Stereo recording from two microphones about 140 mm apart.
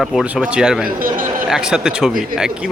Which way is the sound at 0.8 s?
80° right.